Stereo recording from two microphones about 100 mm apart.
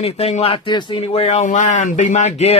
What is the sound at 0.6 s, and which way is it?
Speech, 50° left (ahead or behind).